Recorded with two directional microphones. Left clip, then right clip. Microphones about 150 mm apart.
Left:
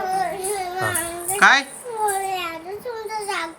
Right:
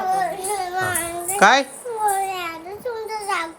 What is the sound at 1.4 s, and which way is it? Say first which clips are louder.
Speech: even; 40° right (ahead or behind).